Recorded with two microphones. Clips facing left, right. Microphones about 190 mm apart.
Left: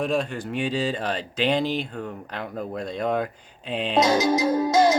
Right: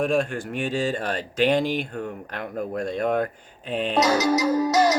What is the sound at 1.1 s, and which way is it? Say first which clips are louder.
Speech: right 5 dB; 50° right (ahead or behind).